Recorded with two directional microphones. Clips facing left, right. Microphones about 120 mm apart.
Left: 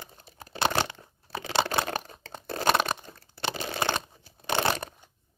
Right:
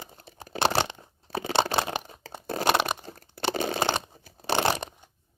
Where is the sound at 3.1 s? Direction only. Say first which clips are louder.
Right 5 dB; 45° right (ahead or behind).